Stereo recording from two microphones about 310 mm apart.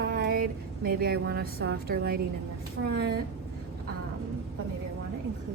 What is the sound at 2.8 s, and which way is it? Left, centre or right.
Speech, right.